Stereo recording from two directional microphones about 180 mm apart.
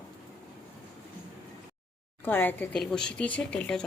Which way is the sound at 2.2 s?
10° left (ahead or behind).